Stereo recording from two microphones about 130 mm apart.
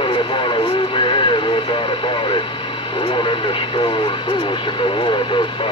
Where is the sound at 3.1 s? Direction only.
40° left (ahead or behind).